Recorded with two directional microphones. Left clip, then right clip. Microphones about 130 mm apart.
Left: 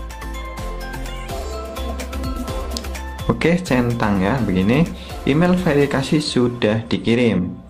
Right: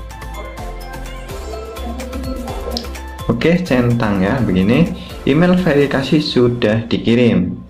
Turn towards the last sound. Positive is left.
turn(degrees=35)  # may be behind; listen again after turning